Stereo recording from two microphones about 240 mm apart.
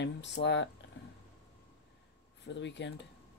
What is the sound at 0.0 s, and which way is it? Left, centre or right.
Speech, left.